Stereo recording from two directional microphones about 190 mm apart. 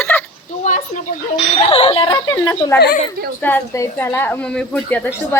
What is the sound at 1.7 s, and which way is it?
Speech, 30° left (ahead or behind).